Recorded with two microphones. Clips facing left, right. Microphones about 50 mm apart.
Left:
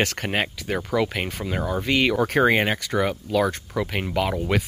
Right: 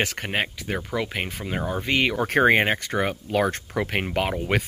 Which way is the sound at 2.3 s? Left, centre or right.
Right.